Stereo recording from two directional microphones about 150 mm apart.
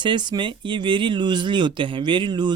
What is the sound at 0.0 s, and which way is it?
Speech, 30° right (ahead or behind).